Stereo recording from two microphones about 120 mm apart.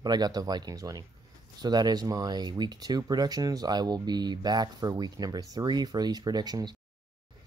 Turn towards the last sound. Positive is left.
turn(degrees=-35)  # may be behind; listen again after turning